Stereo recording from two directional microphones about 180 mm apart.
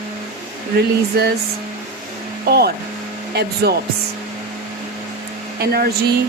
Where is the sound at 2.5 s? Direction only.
60° right (ahead or behind).